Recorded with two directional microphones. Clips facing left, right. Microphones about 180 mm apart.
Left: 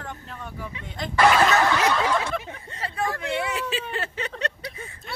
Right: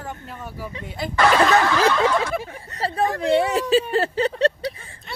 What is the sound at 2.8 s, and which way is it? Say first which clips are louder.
Speech: right 7 dB; 35° right (ahead or behind).